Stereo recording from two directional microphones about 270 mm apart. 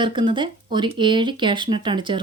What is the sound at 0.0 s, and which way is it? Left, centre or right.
Speech, centre.